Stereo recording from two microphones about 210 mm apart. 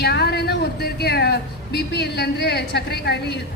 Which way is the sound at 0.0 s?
50° left (ahead or behind).